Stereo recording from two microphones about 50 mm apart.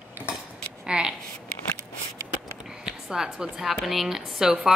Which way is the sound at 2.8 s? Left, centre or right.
Centre.